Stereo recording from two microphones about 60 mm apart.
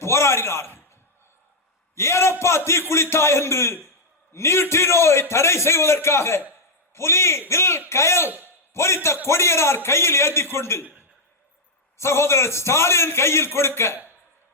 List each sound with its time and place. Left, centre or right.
0.0 s a sound: left
2.0 s a man's voice: left
11.9 s a man's voice: left